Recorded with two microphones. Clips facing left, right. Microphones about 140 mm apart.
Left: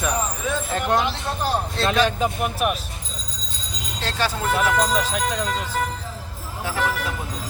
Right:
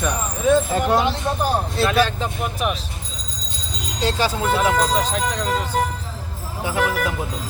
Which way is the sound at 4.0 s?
15° right (ahead or behind).